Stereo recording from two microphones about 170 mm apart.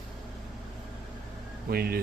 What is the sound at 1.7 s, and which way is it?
Speech, 65° right (ahead or behind).